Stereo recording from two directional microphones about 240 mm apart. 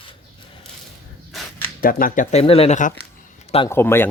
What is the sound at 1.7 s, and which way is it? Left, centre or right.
Speech, left.